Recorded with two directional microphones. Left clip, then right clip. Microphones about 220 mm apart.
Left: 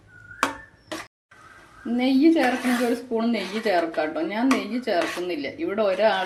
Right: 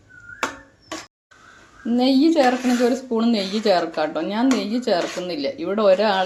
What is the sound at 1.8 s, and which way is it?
A woman's voice, 30° right (ahead or behind).